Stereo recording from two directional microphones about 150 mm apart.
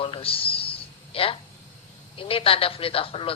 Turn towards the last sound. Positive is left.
turn(degrees=40)  # may be behind; listen again after turning